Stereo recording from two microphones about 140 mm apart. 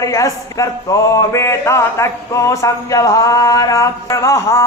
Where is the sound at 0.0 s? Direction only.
25° left (ahead or behind).